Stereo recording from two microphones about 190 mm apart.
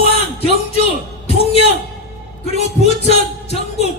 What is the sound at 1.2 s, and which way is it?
Music, 30° left (ahead or behind).